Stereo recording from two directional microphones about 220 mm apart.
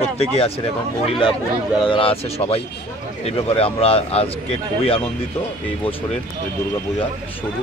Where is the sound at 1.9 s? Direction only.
25° left (ahead or behind).